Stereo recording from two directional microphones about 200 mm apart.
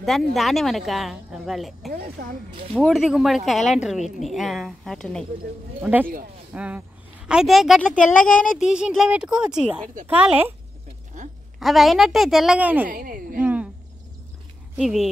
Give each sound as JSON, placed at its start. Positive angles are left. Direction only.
{"t": 0.0, "sound": "speech", "side_deg": 0}
{"t": 1.9, "sound": "a woman's voice", "side_deg": -50}
{"t": 2.7, "sound": "speech", "side_deg": 0}
{"t": 5.8, "sound": "speech", "side_deg": -10}
{"t": 11.6, "sound": "speech", "side_deg": 0}
{"t": 12.9, "sound": "a woman's voice", "side_deg": -45}
{"t": 13.4, "sound": "cricket", "side_deg": -10}
{"t": 14.8, "sound": "speech", "side_deg": 0}